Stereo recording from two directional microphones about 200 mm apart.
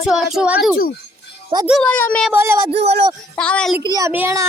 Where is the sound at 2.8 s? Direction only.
30° right (ahead or behind).